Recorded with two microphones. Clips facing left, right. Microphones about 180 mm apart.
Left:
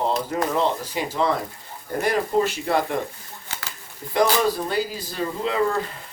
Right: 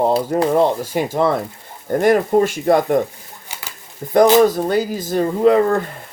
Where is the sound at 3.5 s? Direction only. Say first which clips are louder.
Right 1 dB; 15° right (ahead or behind).